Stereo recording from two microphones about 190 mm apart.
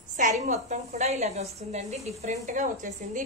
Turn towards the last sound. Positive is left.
turn(degrees=-40)  # may be behind; listen again after turning